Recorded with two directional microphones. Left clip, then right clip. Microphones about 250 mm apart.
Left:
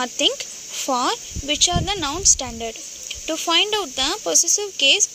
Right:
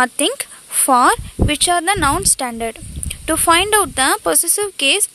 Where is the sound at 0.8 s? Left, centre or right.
Right.